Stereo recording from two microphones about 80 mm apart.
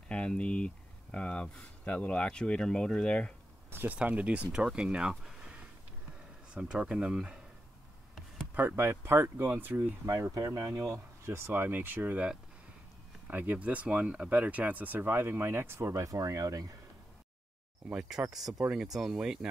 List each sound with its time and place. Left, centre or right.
0.1 s speech: centre
3.7 s speech: right
5.1 s a sound: centre
6.5 s speech: centre
8.5 s speech: right
10.0 s speech: right
17.8 s speech: centre